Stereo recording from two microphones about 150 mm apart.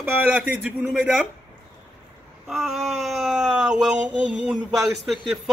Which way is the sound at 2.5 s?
Centre (ahead or behind).